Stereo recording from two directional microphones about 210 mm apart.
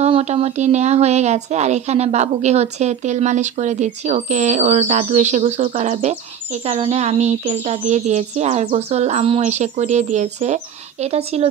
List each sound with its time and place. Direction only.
0.0 s a woman's voice: 30° right (ahead or behind)